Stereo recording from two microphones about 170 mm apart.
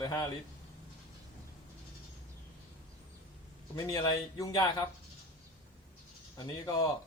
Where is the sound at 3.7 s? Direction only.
20° left (ahead or behind).